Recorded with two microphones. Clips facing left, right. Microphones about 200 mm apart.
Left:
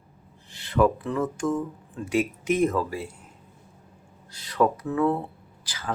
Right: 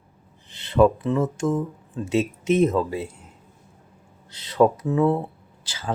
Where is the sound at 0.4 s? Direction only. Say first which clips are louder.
Right 4 dB; 20° right (ahead or behind).